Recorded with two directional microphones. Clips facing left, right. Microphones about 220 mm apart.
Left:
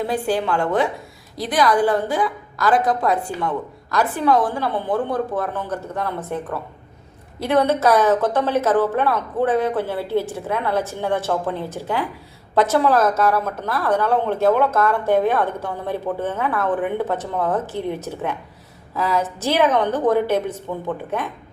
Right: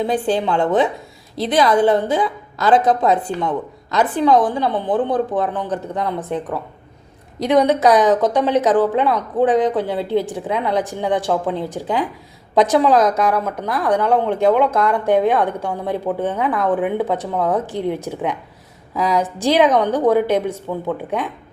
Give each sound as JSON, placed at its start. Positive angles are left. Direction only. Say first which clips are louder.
{"t": 0.0, "sound": "a woman's voice", "louder": "right 3 dB", "side_deg": -20}